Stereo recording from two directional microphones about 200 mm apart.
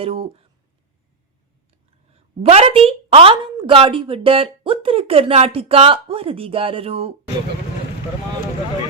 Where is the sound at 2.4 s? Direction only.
30° right (ahead or behind).